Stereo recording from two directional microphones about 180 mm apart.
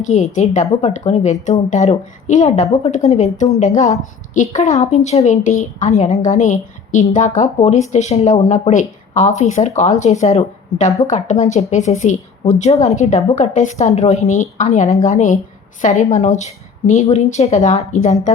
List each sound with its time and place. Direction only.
0.0 s speech: 40° left (ahead or behind)